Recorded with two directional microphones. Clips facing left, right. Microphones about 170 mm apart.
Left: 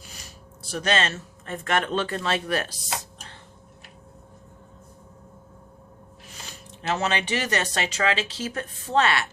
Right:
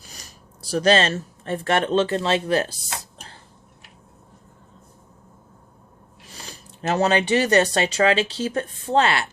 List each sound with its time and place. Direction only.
0.1 s speech: 35° right (ahead or behind)
6.8 s speech: 35° right (ahead or behind)